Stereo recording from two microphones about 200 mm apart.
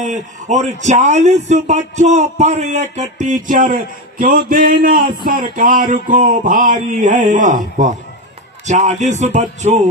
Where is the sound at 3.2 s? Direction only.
40° right (ahead or behind).